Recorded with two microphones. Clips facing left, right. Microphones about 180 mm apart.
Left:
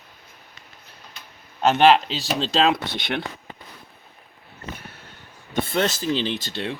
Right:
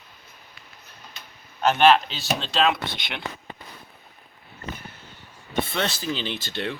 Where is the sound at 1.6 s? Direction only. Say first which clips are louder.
Left 2 dB; 25° left (ahead or behind).